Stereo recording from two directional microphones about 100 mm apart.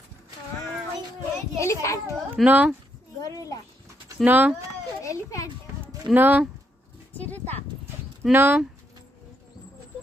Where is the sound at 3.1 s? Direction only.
35° left (ahead or behind).